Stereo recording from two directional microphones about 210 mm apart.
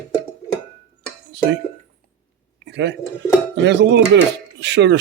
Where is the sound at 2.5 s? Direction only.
55° right (ahead or behind).